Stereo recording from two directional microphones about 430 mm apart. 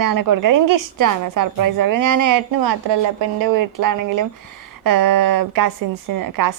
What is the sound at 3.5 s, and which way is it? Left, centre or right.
A woman's voice, right.